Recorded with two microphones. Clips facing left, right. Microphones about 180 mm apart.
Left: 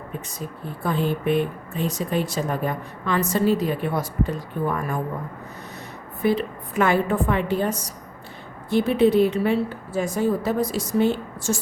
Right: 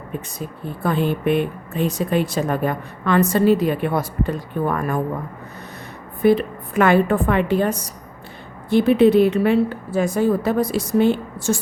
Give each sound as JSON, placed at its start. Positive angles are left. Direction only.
{"t": 0.9, "sound": "speech", "side_deg": -65}
{"t": 6.2, "sound": "speech", "side_deg": -55}